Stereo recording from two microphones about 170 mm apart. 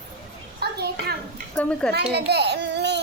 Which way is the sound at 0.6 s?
70° right (ahead or behind).